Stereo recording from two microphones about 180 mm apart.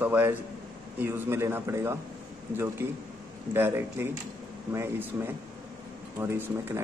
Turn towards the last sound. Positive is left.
turn(degrees=-15)  # may be behind; listen again after turning